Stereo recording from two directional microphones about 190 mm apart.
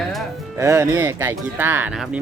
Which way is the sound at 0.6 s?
15° right (ahead or behind).